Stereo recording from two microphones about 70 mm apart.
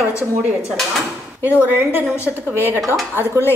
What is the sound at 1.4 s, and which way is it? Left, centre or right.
Speech, right.